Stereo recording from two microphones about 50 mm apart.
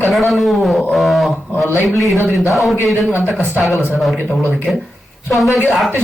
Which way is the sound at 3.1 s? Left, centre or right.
Right.